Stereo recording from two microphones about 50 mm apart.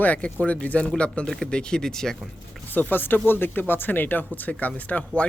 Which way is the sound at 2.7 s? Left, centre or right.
Left.